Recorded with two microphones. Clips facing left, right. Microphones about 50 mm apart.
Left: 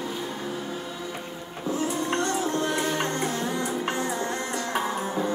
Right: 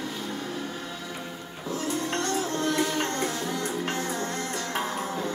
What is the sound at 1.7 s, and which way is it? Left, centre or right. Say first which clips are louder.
Music: left 2 dB; left.